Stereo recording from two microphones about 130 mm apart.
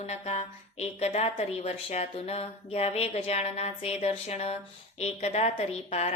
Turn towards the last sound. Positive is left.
turn(degrees=55)  # may be behind; listen again after turning